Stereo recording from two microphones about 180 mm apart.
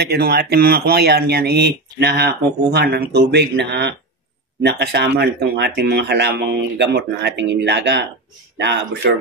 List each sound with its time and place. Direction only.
0.0 s speech: 60° right (ahead or behind)